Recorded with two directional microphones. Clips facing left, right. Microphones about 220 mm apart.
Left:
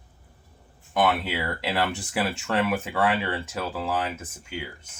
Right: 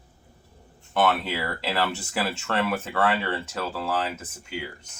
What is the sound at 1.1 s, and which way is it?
Speech, 10° left (ahead or behind).